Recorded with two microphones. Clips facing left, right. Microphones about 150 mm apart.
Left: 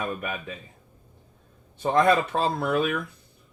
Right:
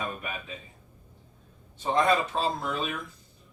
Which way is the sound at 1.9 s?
60° left (ahead or behind).